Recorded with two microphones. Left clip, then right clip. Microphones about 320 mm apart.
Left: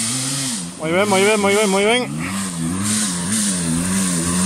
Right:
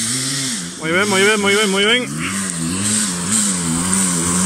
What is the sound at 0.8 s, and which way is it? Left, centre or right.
Speech, centre.